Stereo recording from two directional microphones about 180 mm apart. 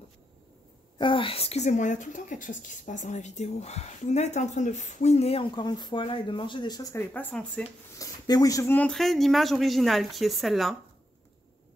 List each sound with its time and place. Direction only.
0.9 s speech: 25° left (ahead or behind); by 7.6 s 5° left (ahead or behind)
8.0 s speech: 20° left (ahead or behind); by 10.8 s centre (ahead or behind)